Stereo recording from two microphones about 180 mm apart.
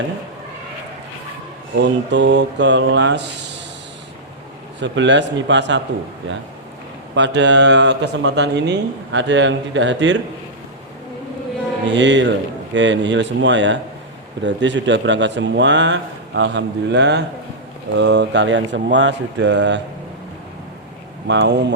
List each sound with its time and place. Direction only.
1.8 s speech: 80° right
4.8 s speech: 80° right
7.2 s speech: 80° right
11.9 s speech: 90° right
21.2 s speech: 75° right (ahead or behind)